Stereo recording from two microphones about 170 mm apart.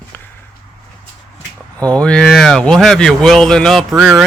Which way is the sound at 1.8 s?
5° left (ahead or behind).